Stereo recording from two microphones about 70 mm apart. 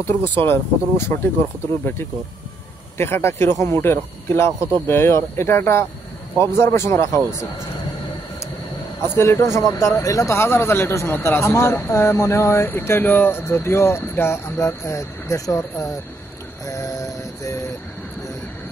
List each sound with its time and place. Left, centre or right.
0.4 s a man's voice: left
3.0 s a man's voice: left
9.0 s a man's voice: left
16.6 s music: left